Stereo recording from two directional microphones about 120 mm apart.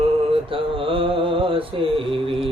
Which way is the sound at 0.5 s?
50° right (ahead or behind).